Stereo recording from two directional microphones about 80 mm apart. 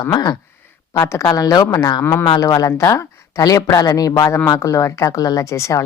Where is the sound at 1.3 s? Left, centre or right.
Left.